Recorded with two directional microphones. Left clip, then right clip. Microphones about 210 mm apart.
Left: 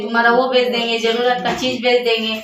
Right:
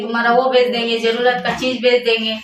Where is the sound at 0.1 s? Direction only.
5° right (ahead or behind).